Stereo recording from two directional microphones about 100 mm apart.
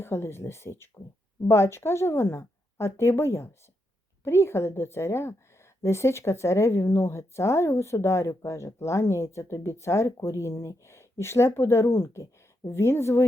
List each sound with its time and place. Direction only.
0.0 s a woman's voice: 25° left (ahead or behind)